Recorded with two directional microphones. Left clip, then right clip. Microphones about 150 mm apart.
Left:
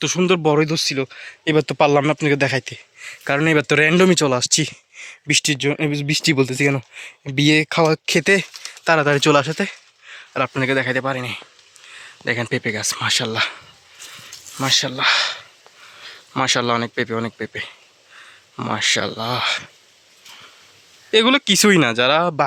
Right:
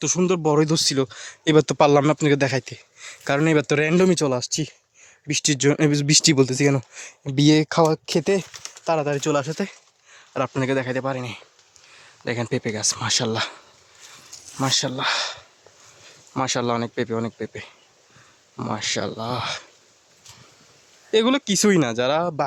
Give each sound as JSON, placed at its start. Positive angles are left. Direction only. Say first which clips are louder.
{"t": 0.0, "sound": "speech", "louder": "left 4 dB", "side_deg": 0}
{"t": 0.6, "sound": "speech", "louder": "left 1 dB", "side_deg": -25}
{"t": 5.5, "sound": "speech", "louder": "right 1 dB", "side_deg": -25}
{"t": 6.2, "sound": "speech", "louder": "left 1 dB", "side_deg": -15}
{"t": 8.0, "sound": "speech", "louder": "left 5 dB", "side_deg": 0}
{"t": 8.9, "sound": "speech", "louder": "left 7 dB", "side_deg": 10}
{"t": 9.4, "sound": "speech", "louder": "left 6 dB", "side_deg": 0}
{"t": 14.6, "sound": "speech", "louder": "left 5 dB", "side_deg": -15}
{"t": 21.1, "sound": "speech", "louder": "left 5 dB", "side_deg": -5}